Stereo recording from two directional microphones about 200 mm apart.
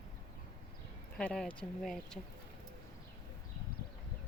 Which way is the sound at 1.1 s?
5° left (ahead or behind).